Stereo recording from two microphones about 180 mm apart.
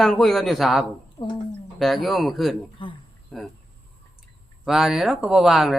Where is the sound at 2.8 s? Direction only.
30° left (ahead or behind).